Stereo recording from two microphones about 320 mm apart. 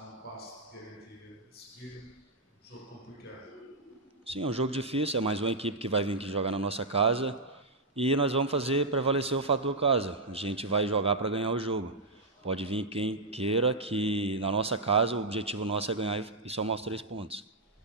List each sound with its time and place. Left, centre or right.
4.3 s a man's voice: centre